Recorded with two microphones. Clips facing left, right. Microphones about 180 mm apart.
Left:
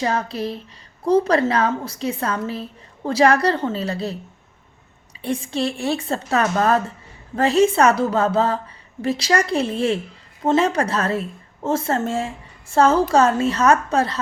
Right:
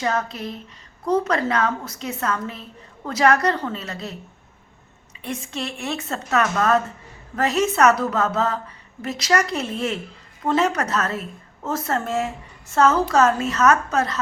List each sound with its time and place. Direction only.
0.0 s a woman's voice: 30° left (ahead or behind)
5.2 s a woman's voice: 30° left (ahead or behind)